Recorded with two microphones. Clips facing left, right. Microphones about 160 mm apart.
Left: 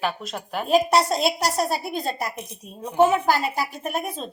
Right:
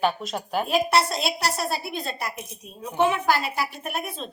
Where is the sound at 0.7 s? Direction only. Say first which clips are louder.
Left 4 dB; 45° left (ahead or behind).